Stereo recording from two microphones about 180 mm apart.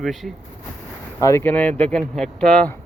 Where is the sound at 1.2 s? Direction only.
15° left (ahead or behind).